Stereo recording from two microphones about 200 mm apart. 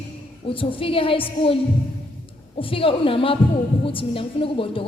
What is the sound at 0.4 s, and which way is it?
A man's voice, 25° left (ahead or behind).